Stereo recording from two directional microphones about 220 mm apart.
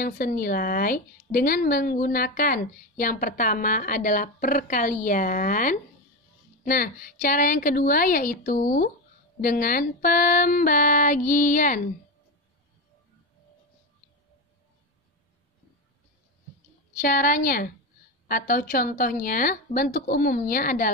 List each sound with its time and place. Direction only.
0.0 s a woman's voice: 40° left (ahead or behind)
16.9 s a woman's voice: 40° left (ahead or behind)